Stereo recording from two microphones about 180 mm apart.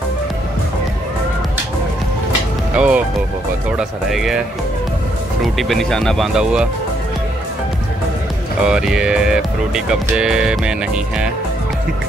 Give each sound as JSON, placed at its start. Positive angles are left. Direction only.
{"t": 2.7, "sound": "speech", "side_deg": -5}
{"t": 5.4, "sound": "speech", "side_deg": 0}
{"t": 8.6, "sound": "speech", "side_deg": -5}